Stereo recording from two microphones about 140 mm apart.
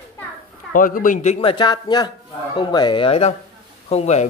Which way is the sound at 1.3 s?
35° left (ahead or behind).